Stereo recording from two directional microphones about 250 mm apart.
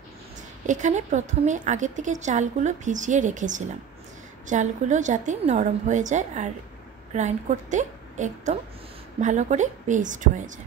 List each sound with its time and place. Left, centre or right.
0.7 s a woman's voice: right